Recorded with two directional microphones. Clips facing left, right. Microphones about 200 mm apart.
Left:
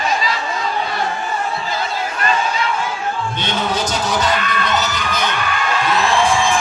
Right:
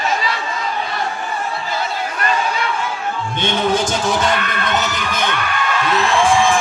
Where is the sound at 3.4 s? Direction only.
50° right (ahead or behind).